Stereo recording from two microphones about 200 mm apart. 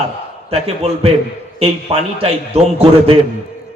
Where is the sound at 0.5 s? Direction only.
30° right (ahead or behind).